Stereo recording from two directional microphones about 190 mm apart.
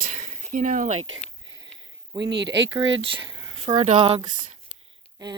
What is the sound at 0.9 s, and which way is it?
Speech, 90° right.